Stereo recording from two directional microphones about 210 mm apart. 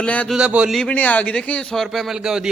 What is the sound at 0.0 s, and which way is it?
A man's voice, 5° left (ahead or behind).